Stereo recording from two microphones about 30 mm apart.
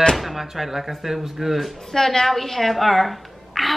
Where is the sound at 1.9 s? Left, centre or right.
Centre.